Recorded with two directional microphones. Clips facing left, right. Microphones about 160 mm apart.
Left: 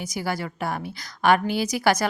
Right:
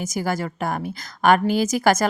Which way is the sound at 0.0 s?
45° right (ahead or behind).